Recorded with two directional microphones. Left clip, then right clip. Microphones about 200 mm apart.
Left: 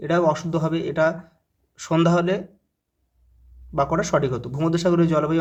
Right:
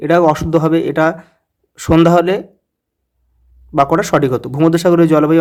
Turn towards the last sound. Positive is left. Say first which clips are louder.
# right 10 dB
turn(degrees=-40)  # may be behind; listen again after turning